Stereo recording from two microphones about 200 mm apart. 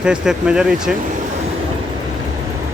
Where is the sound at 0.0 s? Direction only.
5° right (ahead or behind).